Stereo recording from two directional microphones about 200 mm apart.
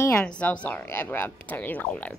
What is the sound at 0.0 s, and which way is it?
A woman's voice, 10° left (ahead or behind).